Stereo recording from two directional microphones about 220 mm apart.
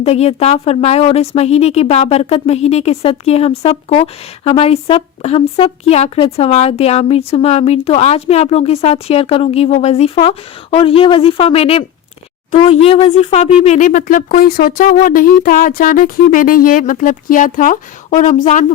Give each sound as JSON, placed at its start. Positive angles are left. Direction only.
{"t": 0.0, "sound": "speech", "side_deg": 30}